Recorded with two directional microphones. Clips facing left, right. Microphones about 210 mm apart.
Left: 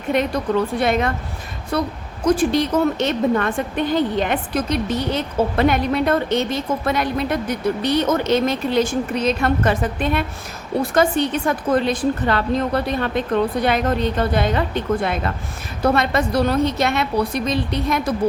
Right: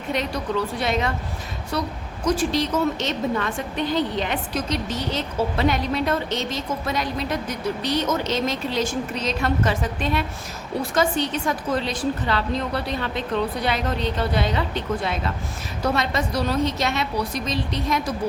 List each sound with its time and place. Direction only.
0.1 s a woman's voice: 55° left (ahead or behind)